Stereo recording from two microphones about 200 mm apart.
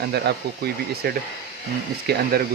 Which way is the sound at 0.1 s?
55° right (ahead or behind).